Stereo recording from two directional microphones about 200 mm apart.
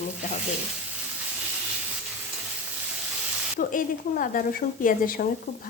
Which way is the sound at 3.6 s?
40° left (ahead or behind).